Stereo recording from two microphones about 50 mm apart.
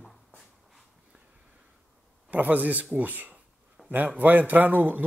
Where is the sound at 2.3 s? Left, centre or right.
Right.